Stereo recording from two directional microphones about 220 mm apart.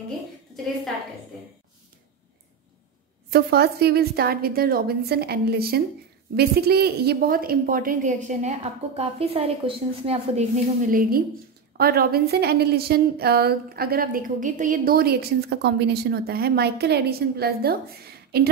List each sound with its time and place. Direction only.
3.3 s a woman's voice: 45° right (ahead or behind); by 10.4 s 25° right (ahead or behind)
10.9 s a woman's voice: 40° right (ahead or behind)